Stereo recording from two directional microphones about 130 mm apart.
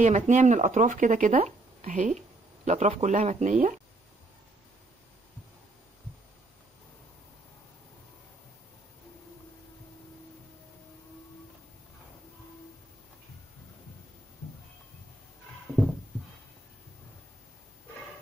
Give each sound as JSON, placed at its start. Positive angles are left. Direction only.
{"t": 0.0, "sound": "speech", "side_deg": -65}
{"t": 1.3, "sound": "a sound", "side_deg": -50}
{"t": 1.9, "sound": "speech", "side_deg": -75}